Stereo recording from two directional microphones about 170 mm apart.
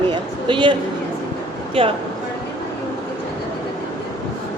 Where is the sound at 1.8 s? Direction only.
35° right (ahead or behind).